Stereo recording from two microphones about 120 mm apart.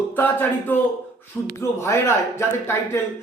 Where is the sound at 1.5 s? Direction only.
20° left (ahead or behind).